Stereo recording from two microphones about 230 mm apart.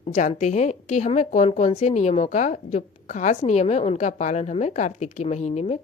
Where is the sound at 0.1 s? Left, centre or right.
Left.